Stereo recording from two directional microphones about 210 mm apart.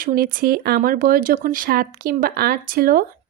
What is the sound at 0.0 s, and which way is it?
Speech, 45° right (ahead or behind).